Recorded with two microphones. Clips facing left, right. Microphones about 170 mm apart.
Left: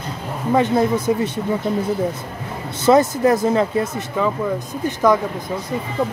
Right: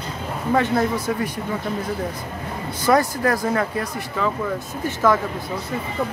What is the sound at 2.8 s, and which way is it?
Speech, 20° left (ahead or behind).